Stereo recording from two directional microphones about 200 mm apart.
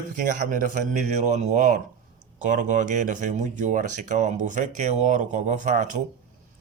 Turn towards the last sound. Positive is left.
turn(degrees=-35)  # may be behind; listen again after turning